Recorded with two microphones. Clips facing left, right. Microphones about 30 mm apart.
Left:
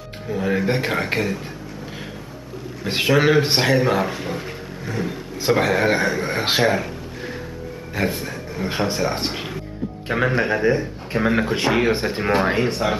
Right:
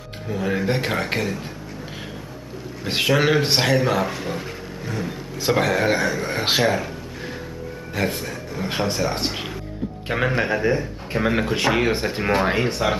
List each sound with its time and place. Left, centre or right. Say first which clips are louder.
0.4 s a man's voice: left 2 dB; centre
2.9 s a man's voice: left 2 dB; centre
5.9 s speech: left 2 dB; centre
6.2 s speech: left 1 dB; centre
7.9 s a man's voice: left 1 dB; centre